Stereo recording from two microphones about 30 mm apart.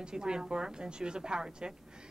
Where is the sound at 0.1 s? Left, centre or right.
Right.